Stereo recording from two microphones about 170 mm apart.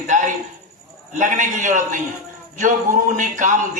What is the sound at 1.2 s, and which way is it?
A man's voice, 45° right (ahead or behind).